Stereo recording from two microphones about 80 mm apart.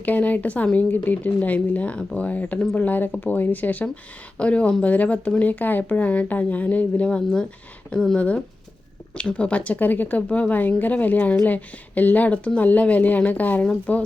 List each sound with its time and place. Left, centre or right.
0.0 s a woman's voice: centre